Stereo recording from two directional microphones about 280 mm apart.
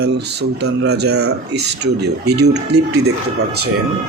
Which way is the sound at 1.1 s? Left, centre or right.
Right.